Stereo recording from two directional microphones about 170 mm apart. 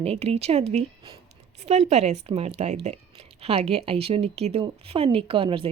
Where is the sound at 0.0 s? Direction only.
35° right (ahead or behind).